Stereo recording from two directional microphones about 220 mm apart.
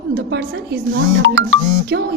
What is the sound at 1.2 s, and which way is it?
Speech, 60° right (ahead or behind).